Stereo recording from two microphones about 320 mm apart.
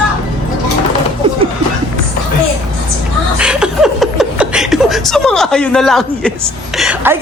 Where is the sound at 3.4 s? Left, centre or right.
Centre.